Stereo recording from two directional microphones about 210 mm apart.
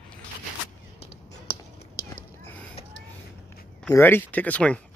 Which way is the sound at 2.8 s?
30° left (ahead or behind).